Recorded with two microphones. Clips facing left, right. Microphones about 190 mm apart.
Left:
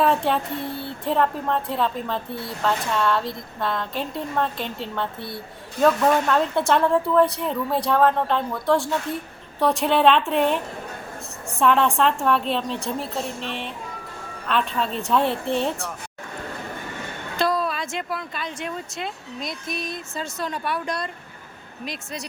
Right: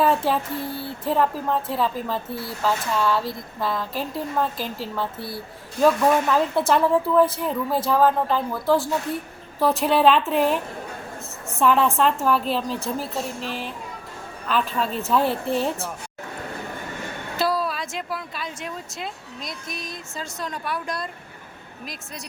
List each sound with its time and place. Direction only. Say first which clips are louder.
0.0 s speech: even; centre (ahead or behind)
17.3 s speech: left 1 dB; 5° right (ahead or behind)